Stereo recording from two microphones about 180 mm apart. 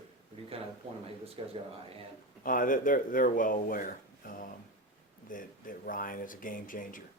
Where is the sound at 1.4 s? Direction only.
30° right (ahead or behind).